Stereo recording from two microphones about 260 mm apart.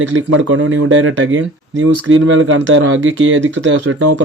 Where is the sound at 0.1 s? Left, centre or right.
Right.